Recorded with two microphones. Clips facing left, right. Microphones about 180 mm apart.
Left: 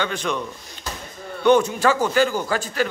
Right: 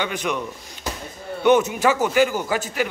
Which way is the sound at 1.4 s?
20° right (ahead or behind).